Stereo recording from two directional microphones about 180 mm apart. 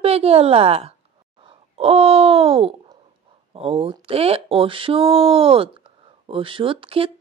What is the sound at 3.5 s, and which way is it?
Speech, 35° right (ahead or behind).